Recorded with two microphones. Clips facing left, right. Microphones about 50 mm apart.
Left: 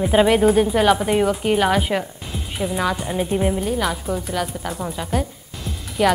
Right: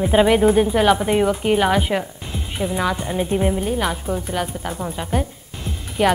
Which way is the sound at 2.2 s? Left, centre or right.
Centre.